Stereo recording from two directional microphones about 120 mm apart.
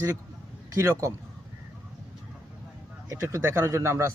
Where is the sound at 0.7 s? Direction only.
25° right (ahead or behind).